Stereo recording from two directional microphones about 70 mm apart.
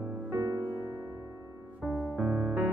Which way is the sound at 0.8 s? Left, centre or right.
Right.